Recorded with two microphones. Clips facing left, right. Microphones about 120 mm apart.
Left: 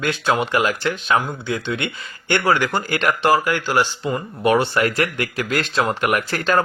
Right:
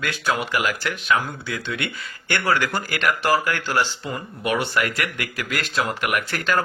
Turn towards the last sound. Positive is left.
turn(degrees=30)  # may be behind; listen again after turning